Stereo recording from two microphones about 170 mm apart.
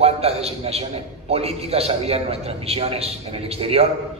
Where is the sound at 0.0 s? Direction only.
35° right (ahead or behind).